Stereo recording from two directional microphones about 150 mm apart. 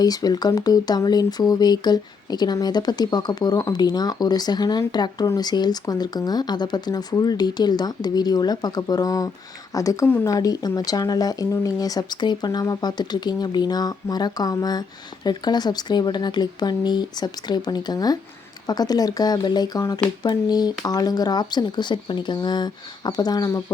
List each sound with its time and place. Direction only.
0.0 s speech: 25° left (ahead or behind)